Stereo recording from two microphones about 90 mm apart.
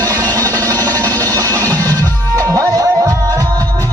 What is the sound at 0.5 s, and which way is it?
Music, 20° left (ahead or behind).